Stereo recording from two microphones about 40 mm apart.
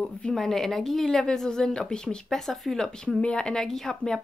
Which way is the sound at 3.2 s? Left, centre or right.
Left.